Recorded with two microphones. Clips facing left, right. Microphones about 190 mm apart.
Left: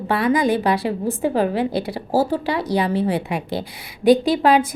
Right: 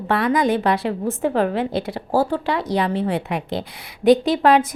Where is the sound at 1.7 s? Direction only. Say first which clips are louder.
Even; 35° left (ahead or behind).